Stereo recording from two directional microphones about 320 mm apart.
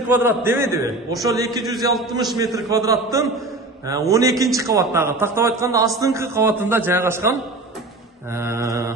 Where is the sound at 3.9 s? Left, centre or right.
Centre.